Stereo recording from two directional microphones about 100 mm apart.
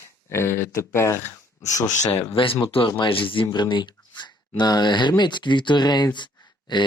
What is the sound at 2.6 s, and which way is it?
Speech, 65° left (ahead or behind).